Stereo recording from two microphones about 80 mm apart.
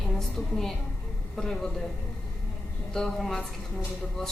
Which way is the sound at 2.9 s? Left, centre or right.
Centre.